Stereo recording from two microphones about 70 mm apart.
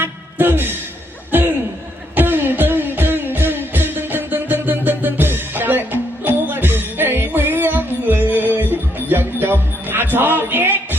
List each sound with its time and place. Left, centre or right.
0.0 s music: right
1.3 s laughter: right
2.1 s music: right